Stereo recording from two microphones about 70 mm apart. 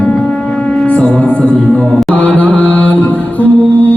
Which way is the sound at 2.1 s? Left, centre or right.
Left.